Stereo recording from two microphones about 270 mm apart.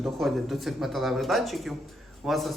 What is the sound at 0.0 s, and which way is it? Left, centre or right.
A man's voice, centre.